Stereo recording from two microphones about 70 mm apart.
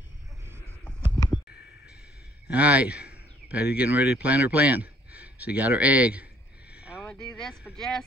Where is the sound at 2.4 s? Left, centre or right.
Right.